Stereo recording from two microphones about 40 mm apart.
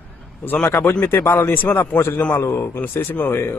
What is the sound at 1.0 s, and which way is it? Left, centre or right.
A man's voice, left.